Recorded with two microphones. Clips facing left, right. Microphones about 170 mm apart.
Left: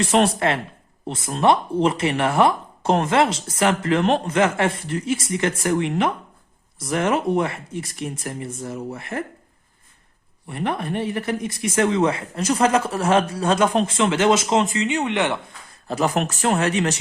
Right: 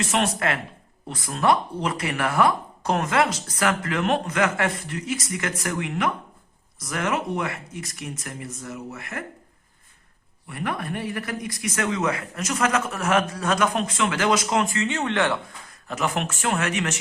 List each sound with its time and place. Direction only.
0.0 s speech: 30° left (ahead or behind)
10.5 s speech: 25° left (ahead or behind)
15.9 s speech: 35° left (ahead or behind)